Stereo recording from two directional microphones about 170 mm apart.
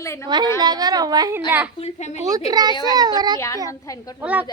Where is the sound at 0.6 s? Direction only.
25° right (ahead or behind).